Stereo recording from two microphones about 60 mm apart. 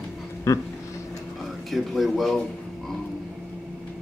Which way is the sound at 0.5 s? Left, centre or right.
Left.